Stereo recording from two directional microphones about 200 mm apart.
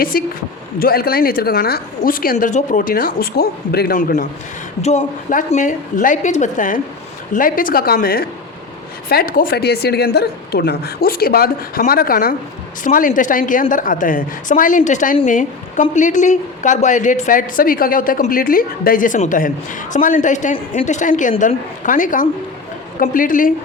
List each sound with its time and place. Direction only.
0.0 s a woman's voice: 45° left (ahead or behind)
4.8 s a woman's voice: 35° left (ahead or behind)